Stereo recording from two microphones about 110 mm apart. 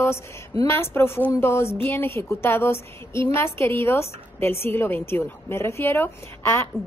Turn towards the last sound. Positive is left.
turn(degrees=25)  # may be behind; listen again after turning